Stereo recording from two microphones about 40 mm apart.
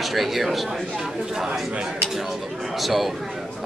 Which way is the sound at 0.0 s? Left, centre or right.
Centre.